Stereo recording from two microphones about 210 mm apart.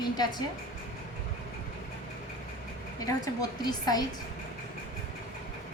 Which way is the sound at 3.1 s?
20° left (ahead or behind).